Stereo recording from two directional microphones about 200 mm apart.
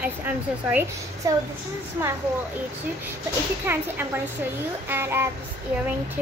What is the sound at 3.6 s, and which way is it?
A woman's voice, 10° right (ahead or behind).